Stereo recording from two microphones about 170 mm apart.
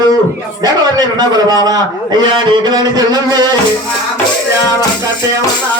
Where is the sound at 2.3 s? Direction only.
25° right (ahead or behind).